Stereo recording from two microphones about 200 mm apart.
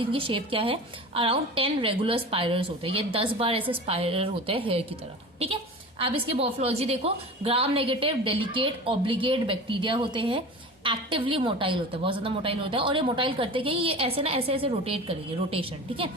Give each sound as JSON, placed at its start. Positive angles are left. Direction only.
{"t": 0.0, "sound": "a woman's voice", "side_deg": -25}
{"t": 6.0, "sound": "a woman's voice", "side_deg": -30}